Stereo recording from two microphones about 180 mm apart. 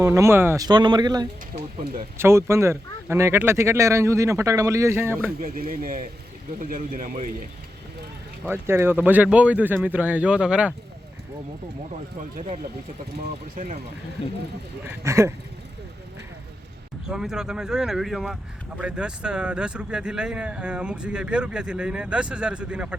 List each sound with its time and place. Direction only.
0.0 s speech: 15° right (ahead or behind)
2.1 s speech: 15° right (ahead or behind)
5.4 s speech: 55° right (ahead or behind)
8.4 s speech: 10° right (ahead or behind)
14.8 s speech: 15° right (ahead or behind)
17.1 s speech: 5° right (ahead or behind)